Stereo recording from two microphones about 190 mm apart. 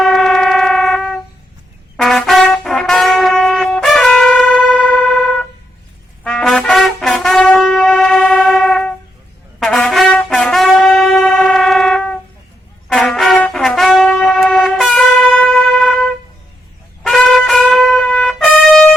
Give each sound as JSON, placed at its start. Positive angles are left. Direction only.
{"t": 0.0, "sound": "train", "side_deg": 0}
{"t": 2.0, "sound": "brass instrument", "side_deg": 0}
{"t": 17.0, "sound": "trumpet", "side_deg": 0}